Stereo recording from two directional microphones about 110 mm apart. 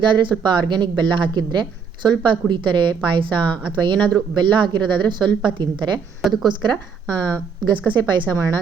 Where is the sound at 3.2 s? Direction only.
10° left (ahead or behind).